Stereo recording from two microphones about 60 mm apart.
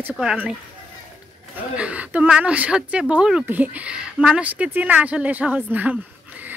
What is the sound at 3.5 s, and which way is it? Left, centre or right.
Speech, right.